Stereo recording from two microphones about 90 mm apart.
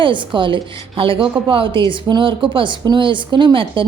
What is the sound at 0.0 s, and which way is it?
Speech, 65° right (ahead or behind).